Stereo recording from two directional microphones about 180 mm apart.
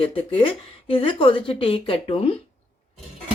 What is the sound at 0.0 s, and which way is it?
A woman's voice, 30° left (ahead or behind).